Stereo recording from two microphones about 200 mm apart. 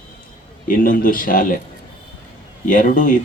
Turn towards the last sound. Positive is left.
turn(degrees=40)  # may be behind; listen again after turning